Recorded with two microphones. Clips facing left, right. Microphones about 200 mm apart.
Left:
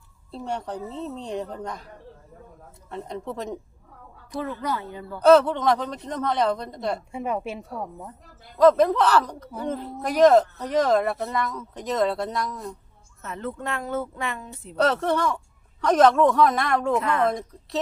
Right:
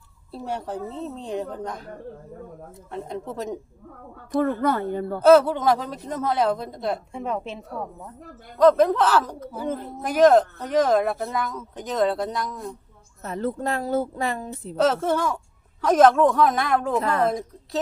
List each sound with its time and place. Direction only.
0.3 s speech: 5° right (ahead or behind)
2.9 s speech: centre (ahead or behind)
4.3 s a woman's voice: 55° right (ahead or behind)
5.2 s speech: 5° right (ahead or behind)
13.2 s speech: 35° right (ahead or behind)
14.8 s speech: centre (ahead or behind)
17.0 s speech: 35° right (ahead or behind)
17.2 s speech: 5° right (ahead or behind)